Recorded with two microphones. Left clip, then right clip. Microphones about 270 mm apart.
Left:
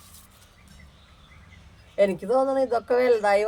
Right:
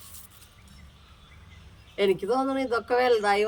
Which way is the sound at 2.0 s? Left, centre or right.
Left.